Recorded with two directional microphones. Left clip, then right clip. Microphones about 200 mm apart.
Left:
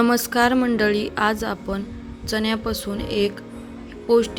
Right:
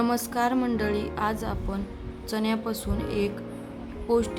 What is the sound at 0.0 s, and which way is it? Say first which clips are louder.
A woman's voice: left 7 dB; 20° left (ahead or behind).